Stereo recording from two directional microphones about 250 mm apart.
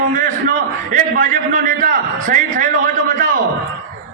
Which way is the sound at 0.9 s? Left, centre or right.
Right.